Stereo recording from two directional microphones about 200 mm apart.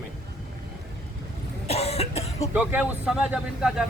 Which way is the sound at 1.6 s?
30° left (ahead or behind).